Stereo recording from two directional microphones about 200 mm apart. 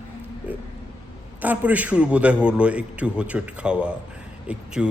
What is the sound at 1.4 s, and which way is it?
Speech, 10° right (ahead or behind).